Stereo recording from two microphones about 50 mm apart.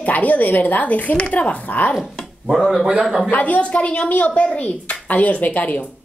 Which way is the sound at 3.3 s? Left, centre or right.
Left.